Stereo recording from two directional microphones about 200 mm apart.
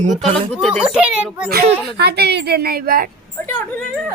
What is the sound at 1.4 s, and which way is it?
A child's voice, 50° right (ahead or behind).